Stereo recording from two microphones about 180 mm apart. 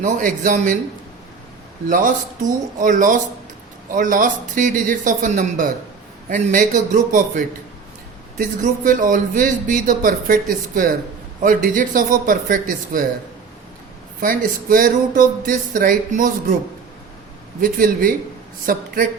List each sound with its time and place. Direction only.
0.0 s a man's voice: 45° right (ahead or behind)
1.9 s a man's voice: 50° right (ahead or behind)
14.2 s a man's voice: 50° right (ahead or behind)
17.6 s a man's voice: 50° right (ahead or behind)